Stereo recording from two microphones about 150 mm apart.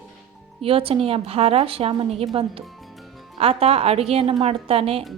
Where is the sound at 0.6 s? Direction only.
40° right (ahead or behind).